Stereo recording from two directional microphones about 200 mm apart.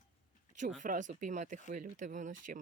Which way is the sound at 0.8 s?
40° right (ahead or behind).